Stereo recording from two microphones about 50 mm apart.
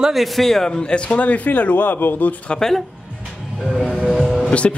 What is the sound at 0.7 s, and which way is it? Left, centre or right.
A man's voice, centre.